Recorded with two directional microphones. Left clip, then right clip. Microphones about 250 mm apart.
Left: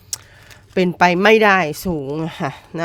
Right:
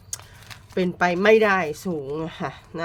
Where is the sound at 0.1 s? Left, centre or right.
Left.